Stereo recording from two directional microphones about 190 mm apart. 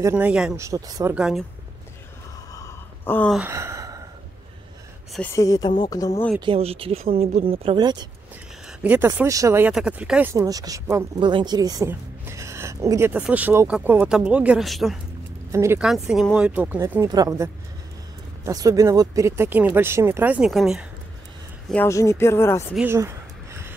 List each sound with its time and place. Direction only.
0.0 s a woman's voice: 10° right (ahead or behind)
0.6 s a woman's voice: 20° right (ahead or behind)
1.1 s speech: 5° right (ahead or behind)
2.5 s a sound: 15° left (ahead or behind)
3.3 s gasp: 15° right (ahead or behind)
5.1 s speech: 10° left (ahead or behind)
6.4 s speech: 30° right (ahead or behind)
8.6 s a woman's voice: 10° right (ahead or behind)
10.3 s a woman's voice: 20° right (ahead or behind); by 15.0 s centre (ahead or behind)
15.5 s a woman's voice: 15° right (ahead or behind)
15.8 s a woman's voice: 5° right (ahead or behind)
21.6 s speech: 10° left (ahead or behind)
22.8 s a sound: 15° right (ahead or behind)